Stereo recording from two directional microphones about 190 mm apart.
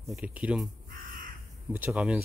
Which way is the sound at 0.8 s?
50° right (ahead or behind).